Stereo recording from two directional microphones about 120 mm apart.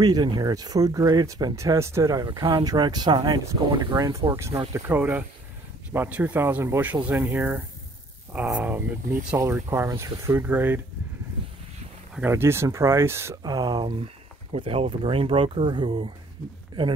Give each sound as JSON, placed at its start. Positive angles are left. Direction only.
{"t": 0.0, "sound": "speech", "side_deg": -35}
{"t": 12.2, "sound": "speech", "side_deg": -20}
{"t": 13.4, "sound": "speech", "side_deg": -35}
{"t": 14.0, "sound": "speech", "side_deg": -50}